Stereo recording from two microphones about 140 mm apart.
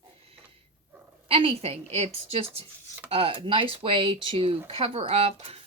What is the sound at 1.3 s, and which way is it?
Speech, 40° right (ahead or behind).